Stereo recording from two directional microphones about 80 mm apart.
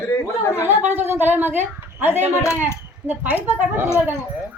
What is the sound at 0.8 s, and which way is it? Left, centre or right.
A woman's voice, right.